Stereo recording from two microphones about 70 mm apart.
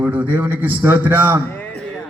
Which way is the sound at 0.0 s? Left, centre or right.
Right.